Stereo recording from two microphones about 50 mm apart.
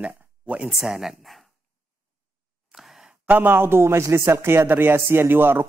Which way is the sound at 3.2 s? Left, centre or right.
Right.